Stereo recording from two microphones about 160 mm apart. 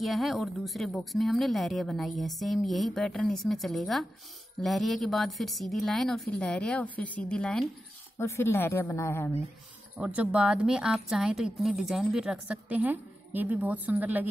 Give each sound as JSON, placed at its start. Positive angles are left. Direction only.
{"t": 0.0, "sound": "a woman's voice", "side_deg": 0}
{"t": 8.2, "sound": "a woman's voice", "side_deg": 15}
{"t": 9.9, "sound": "a woman's voice", "side_deg": -5}